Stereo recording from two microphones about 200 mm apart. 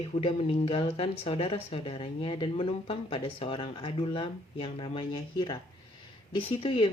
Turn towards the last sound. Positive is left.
turn(degrees=25)  # may be behind; listen again after turning